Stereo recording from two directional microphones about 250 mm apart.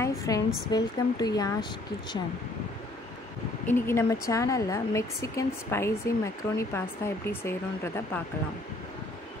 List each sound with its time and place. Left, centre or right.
0.0 s a woman's voice: centre
3.6 s speech: centre